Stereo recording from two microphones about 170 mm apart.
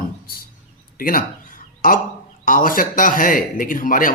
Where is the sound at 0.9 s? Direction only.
55° left (ahead or behind).